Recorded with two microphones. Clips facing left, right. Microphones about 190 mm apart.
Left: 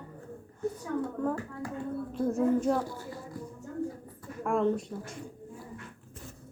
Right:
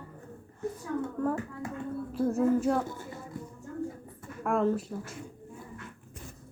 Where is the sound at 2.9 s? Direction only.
20° right (ahead or behind).